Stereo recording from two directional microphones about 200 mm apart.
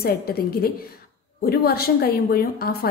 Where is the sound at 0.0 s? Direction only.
50° left (ahead or behind).